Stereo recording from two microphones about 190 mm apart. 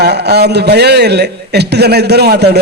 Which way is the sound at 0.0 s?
60° right (ahead or behind).